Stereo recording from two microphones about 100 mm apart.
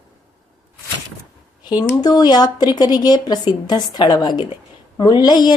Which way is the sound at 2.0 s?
45° left (ahead or behind).